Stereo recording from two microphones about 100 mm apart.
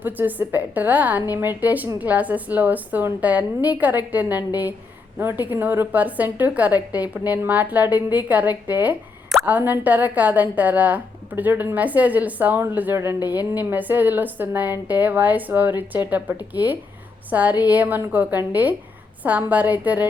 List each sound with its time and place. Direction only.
0.0 s a woman's voice: 20° right (ahead or behind)